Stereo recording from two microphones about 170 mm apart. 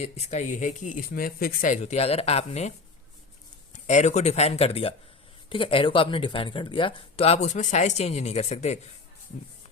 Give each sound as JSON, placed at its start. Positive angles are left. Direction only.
{"t": 0.0, "sound": "speech", "side_deg": 40}